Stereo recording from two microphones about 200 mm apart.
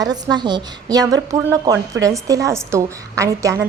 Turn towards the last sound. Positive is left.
turn(degrees=-15)  # may be behind; listen again after turning